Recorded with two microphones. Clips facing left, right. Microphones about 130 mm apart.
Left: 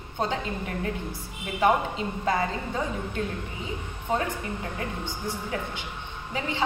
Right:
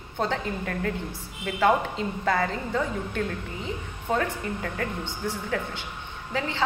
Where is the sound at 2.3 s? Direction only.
20° left (ahead or behind).